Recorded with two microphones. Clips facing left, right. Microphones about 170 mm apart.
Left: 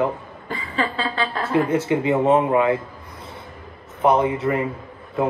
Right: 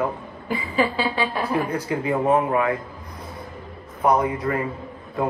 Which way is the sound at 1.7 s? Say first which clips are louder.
Left 4 dB; 25° left (ahead or behind).